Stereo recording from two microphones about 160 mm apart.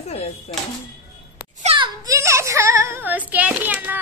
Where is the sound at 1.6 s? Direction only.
30° right (ahead or behind).